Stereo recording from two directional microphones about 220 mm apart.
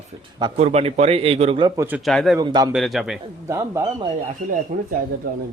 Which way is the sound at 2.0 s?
Centre (ahead or behind).